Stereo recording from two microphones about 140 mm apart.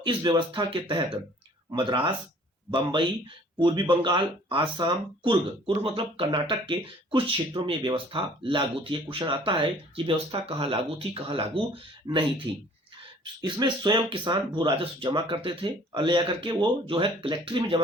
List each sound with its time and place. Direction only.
0.0 s speech: 35° right (ahead or behind)
3.6 s speech: 35° right (ahead or behind)